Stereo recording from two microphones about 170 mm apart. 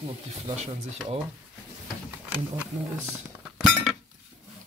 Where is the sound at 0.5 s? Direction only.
40° right (ahead or behind).